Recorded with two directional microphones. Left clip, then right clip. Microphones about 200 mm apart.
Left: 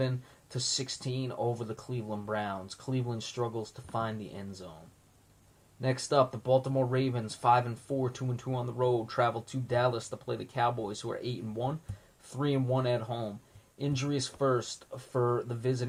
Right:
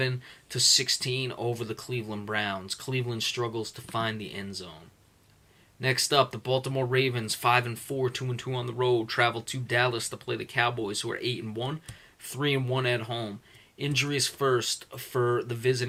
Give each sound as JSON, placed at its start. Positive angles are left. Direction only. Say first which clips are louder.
{"t": 0.5, "sound": "speech", "louder": "right 11 dB", "side_deg": -15}
{"t": 5.8, "sound": "speech", "louder": "right 3 dB", "side_deg": -15}
{"t": 15.1, "sound": "speech", "louder": "right 3 dB", "side_deg": -35}
{"t": 15.4, "sound": "speech", "louder": "right 6 dB", "side_deg": -15}